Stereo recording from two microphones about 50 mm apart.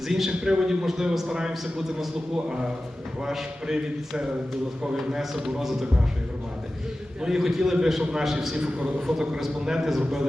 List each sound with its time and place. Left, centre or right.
0.1 s a man's voice: centre
4.9 s a man's voice: centre
7.2 s a man's voice: centre